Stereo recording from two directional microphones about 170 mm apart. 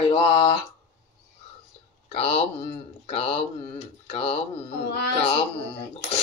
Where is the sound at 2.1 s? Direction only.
35° left (ahead or behind).